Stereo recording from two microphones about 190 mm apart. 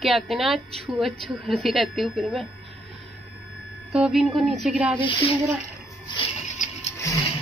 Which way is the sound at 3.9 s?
5° right (ahead or behind).